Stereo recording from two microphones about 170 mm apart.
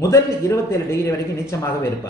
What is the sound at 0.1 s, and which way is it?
A man's voice, 15° left (ahead or behind).